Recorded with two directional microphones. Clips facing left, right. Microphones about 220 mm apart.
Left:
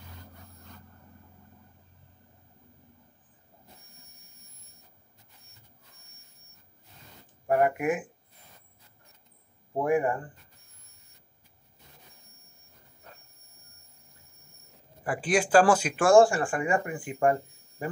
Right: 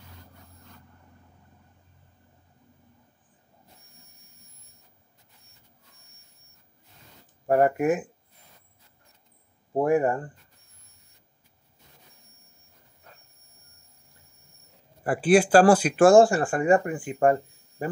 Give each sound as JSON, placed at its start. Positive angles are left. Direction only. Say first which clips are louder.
{"t": 7.4, "sound": "speech", "louder": "right 4 dB", "side_deg": -40}
{"t": 9.8, "sound": "speech", "louder": "right 3 dB", "side_deg": -40}
{"t": 15.0, "sound": "speech", "louder": "right 7 dB", "side_deg": -40}